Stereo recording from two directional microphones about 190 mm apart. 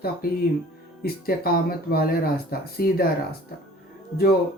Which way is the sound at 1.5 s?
55° left (ahead or behind).